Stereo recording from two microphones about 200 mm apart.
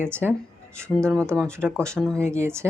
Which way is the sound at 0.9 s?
5° left (ahead or behind).